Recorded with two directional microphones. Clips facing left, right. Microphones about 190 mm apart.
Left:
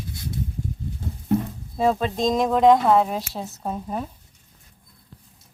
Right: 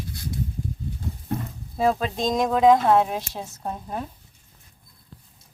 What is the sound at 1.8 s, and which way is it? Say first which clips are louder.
Speech: left 1 dB; centre (ahead or behind).